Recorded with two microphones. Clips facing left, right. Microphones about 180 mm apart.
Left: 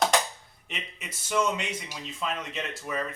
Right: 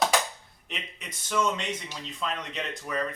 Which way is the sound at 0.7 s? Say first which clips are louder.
Even; 5° left (ahead or behind).